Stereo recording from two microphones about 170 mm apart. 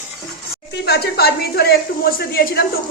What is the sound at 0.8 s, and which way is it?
A woman's voice, 70° left (ahead or behind).